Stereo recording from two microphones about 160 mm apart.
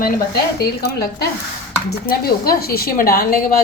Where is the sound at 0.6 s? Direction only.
75° left (ahead or behind).